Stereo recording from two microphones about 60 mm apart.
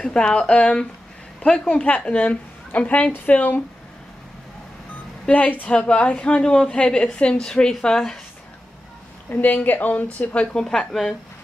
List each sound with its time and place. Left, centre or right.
0.0 s a woman's voice: centre
5.3 s a woman's voice: left; by 8.2 s centre
9.3 s a woman's voice: left; by 11.1 s centre